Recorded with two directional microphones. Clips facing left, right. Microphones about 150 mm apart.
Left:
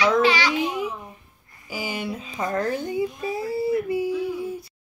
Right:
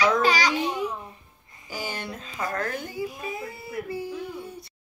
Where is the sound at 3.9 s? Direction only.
10° left (ahead or behind).